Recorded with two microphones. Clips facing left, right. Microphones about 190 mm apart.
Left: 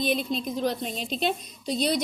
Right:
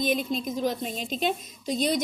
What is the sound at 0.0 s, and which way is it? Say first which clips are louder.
A woman's voice: even; 45° right (ahead or behind).